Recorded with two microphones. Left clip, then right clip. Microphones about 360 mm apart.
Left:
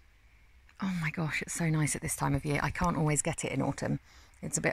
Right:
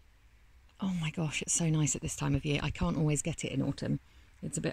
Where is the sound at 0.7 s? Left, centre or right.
Centre.